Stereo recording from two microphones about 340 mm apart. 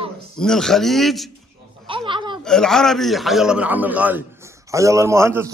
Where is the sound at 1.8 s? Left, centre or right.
Centre.